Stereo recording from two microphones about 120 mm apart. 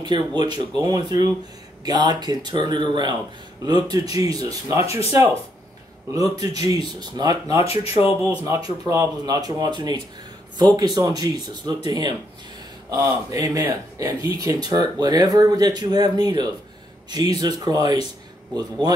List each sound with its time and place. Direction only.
0.0 s speech: 40° right (ahead or behind)
6.1 s speech: 30° right (ahead or behind)
7.6 s speech: 55° left (ahead or behind)
8.4 s speech: 35° right (ahead or behind)